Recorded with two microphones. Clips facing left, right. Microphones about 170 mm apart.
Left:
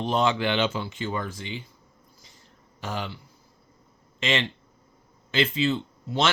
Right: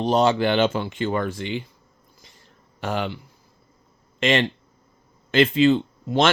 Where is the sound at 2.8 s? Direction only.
60° right (ahead or behind).